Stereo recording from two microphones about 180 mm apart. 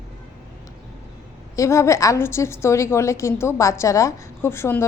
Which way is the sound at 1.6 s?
15° left (ahead or behind).